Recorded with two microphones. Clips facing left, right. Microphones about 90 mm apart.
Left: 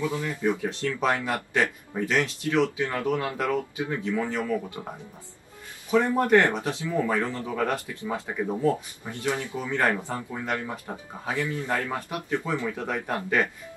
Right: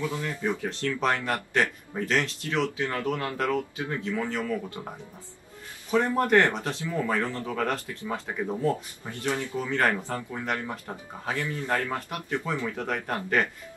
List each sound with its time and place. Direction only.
0.1 s speech: 10° left (ahead or behind)